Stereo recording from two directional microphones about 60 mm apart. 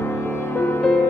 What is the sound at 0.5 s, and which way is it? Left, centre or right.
Music, left.